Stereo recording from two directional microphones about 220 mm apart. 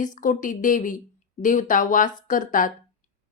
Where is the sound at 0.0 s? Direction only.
35° left (ahead or behind).